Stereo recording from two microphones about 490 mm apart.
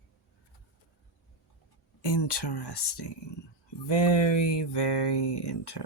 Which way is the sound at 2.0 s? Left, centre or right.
Left.